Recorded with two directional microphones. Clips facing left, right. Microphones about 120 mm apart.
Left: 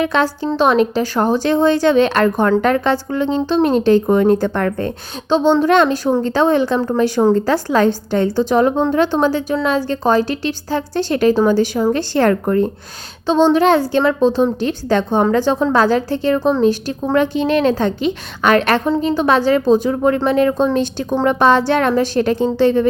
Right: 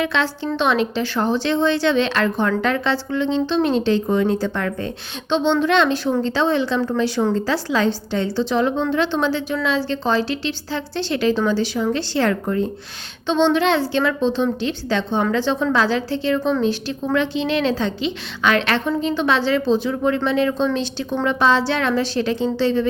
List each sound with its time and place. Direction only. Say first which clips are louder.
0.0 s a child's voice: left 5 dB; 40° left (ahead or behind)